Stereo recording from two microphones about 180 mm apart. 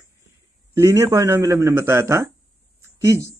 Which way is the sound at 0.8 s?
15° right (ahead or behind).